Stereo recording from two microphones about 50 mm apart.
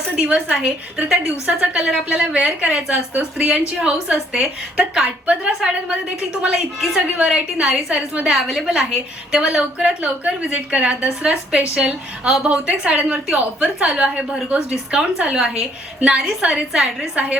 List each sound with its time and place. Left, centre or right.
0.3 s a woman's voice: centre
2.0 s a woman's voice: right
5.0 s a woman's voice: right
6.4 s a woman's voice: centre